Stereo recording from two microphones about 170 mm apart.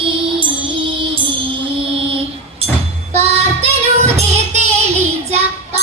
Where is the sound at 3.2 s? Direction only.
35° right (ahead or behind).